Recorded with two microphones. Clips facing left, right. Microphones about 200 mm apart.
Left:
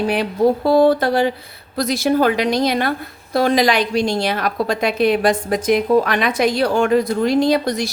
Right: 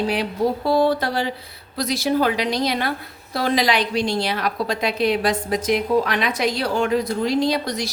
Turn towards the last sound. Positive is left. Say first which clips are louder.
# left 5 dB
turn(degrees=50)  # may be behind; listen again after turning